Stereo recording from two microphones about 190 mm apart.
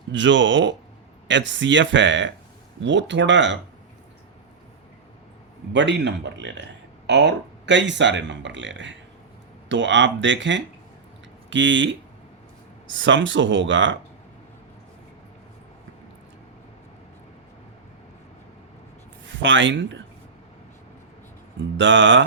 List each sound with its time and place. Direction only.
0.1 s speech: 75° right (ahead or behind)
5.7 s speech: 65° right (ahead or behind)
19.2 s speech: 75° right (ahead or behind)
21.8 s speech: 75° right (ahead or behind)